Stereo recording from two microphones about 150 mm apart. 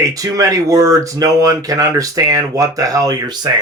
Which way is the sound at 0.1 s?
20° right (ahead or behind).